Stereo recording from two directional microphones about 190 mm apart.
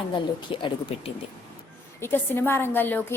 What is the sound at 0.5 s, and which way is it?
Speech, 25° left (ahead or behind).